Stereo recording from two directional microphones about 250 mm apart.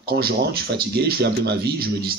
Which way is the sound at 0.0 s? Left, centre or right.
Right.